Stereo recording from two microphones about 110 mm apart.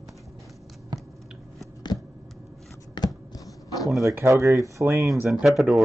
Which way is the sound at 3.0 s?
35° left (ahead or behind).